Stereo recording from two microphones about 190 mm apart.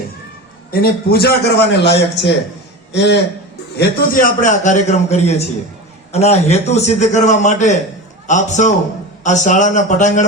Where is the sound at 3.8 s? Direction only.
50° left (ahead or behind).